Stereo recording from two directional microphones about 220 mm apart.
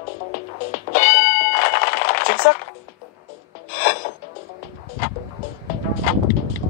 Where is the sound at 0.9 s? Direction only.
40° left (ahead or behind).